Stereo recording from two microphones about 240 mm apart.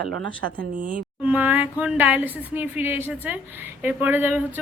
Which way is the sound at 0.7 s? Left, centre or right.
Right.